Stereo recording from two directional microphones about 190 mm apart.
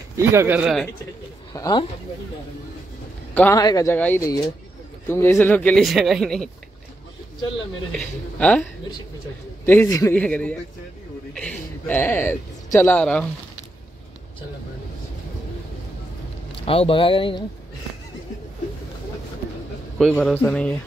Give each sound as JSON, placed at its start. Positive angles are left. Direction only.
{"t": 0.1, "sound": "speech", "side_deg": -15}
{"t": 1.5, "sound": "speech", "side_deg": 20}
{"t": 3.3, "sound": "speech", "side_deg": 10}
{"t": 8.0, "sound": "speech", "side_deg": 5}
{"t": 9.7, "sound": "speech", "side_deg": 15}
{"t": 16.5, "sound": "speech", "side_deg": 30}
{"t": 20.0, "sound": "speech", "side_deg": 5}